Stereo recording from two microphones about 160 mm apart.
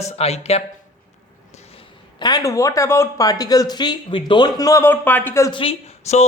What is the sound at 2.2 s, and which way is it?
Speech, 25° left (ahead or behind).